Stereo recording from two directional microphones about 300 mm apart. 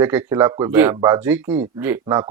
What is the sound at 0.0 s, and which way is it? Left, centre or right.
Speech, centre.